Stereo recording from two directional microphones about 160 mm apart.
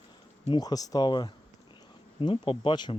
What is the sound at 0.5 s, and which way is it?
Speech, 25° left (ahead or behind).